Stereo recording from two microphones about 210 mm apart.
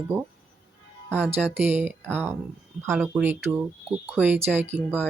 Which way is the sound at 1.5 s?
10° right (ahead or behind).